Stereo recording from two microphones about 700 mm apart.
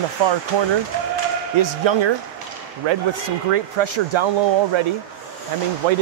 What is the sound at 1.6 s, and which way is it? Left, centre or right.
Speech, right.